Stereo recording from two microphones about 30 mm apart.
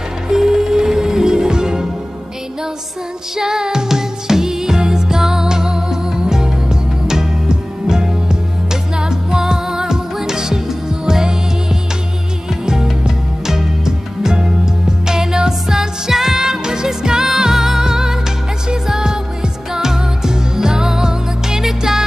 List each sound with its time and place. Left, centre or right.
0.3 s music: centre
3.3 s music: right
13.5 s music: centre